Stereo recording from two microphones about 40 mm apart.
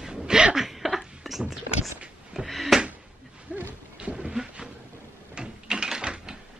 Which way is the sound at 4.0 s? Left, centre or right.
Right.